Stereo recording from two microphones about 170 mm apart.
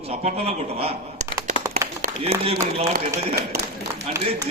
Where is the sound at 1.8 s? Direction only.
15° right (ahead or behind).